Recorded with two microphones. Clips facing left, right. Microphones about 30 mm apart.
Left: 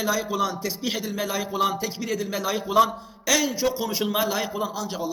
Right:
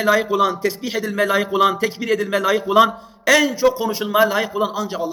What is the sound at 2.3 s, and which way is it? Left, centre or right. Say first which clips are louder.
Speech: right 6 dB; right.